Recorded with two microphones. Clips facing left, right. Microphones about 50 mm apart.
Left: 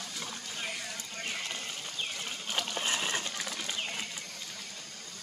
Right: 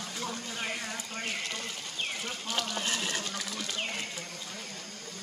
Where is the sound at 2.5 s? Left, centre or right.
Left.